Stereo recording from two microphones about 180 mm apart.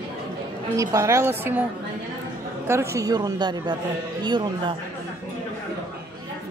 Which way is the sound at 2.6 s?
15° right (ahead or behind).